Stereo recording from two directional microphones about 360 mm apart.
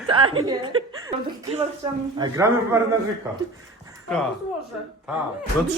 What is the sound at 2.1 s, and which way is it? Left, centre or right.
Speech, centre.